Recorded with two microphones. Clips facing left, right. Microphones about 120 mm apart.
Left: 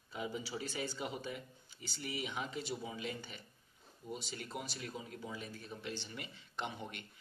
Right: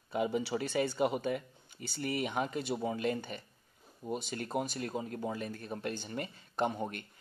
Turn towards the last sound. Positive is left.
turn(degrees=-45)  # may be behind; listen again after turning